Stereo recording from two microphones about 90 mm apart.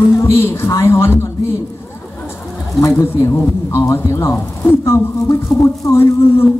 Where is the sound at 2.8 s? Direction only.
30° left (ahead or behind).